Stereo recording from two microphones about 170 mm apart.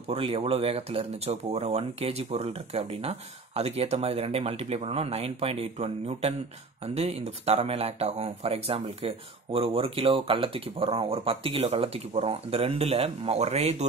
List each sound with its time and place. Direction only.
0.1 s speech: 35° right (ahead or behind)